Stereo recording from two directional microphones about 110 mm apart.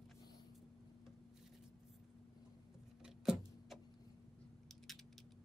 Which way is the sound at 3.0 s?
5° right (ahead or behind).